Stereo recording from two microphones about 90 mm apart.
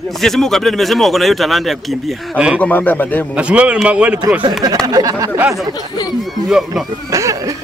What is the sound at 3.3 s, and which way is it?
Speech, 15° right (ahead or behind).